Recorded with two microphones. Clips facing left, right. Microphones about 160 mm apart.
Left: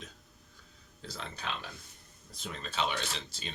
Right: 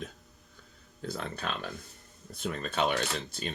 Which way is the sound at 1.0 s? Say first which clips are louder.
Right 5 dB; 55° right (ahead or behind).